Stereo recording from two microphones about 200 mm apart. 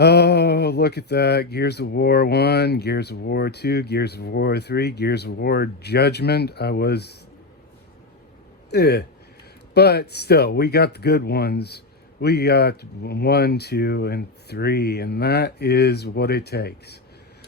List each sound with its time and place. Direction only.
0.0 s speech: 55° left (ahead or behind)
8.7 s speech: 55° left (ahead or behind)